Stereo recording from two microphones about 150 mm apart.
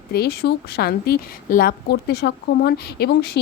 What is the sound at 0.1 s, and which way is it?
A woman's voice, 90° left.